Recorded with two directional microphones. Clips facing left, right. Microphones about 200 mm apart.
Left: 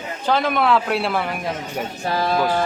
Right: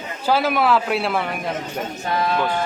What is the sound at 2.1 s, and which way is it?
Speech, 35° left (ahead or behind).